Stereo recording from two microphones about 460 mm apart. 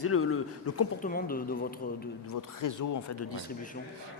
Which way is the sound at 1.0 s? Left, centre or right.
Centre.